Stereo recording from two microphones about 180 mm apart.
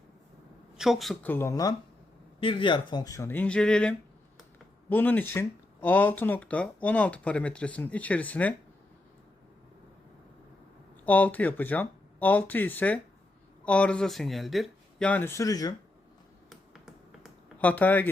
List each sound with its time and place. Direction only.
0.8 s speech: centre (ahead or behind); by 1.7 s 20° left (ahead or behind)
2.4 s speech: 30° left (ahead or behind); by 8.5 s 10° left (ahead or behind)
11.0 s speech: 10° left (ahead or behind)
16.5 s finger snapping: centre (ahead or behind)
17.6 s speech: 10° left (ahead or behind)